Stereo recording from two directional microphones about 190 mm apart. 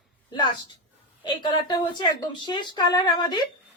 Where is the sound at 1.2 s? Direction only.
20° left (ahead or behind).